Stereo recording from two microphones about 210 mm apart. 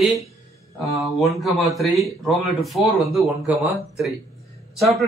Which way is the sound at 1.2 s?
Centre (ahead or behind).